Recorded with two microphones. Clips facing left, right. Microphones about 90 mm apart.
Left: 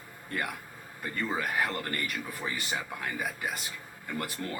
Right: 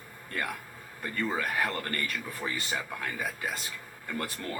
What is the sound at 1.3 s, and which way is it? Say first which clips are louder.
Speech: left 1 dB; 20° left (ahead or behind).